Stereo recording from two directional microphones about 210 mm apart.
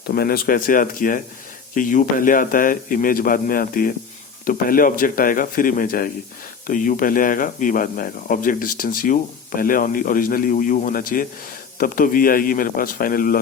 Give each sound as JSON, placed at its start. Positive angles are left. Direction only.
{"t": 0.1, "sound": "a man's voice", "side_deg": 45}